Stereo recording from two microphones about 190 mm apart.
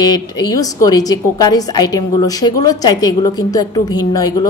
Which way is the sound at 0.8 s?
20° left (ahead or behind).